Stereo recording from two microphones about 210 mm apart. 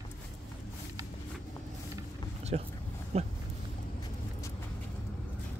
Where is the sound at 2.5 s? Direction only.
30° right (ahead or behind).